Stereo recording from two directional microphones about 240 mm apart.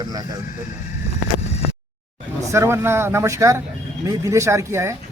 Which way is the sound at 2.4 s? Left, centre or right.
Centre.